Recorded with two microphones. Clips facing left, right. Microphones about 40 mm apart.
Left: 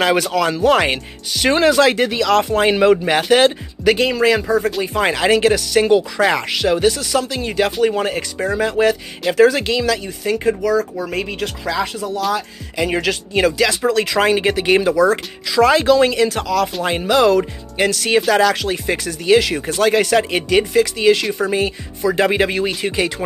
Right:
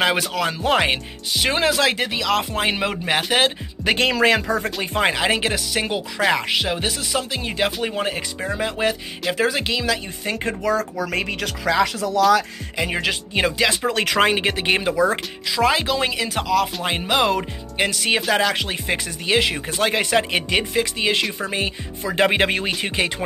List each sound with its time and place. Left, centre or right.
0.0 s speech: centre
3.9 s speech: right
4.2 s speech: right
5.0 s speech: centre
10.2 s speech: right
11.3 s speech: right
12.7 s speech: centre
13.1 s speech: right
13.9 s speech: right
15.5 s speech: centre; by 22.2 s right
22.2 s speech: right